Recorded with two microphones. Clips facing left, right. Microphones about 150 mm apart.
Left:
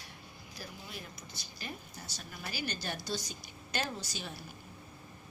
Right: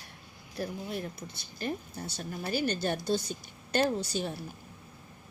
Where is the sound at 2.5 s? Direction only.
55° right (ahead or behind).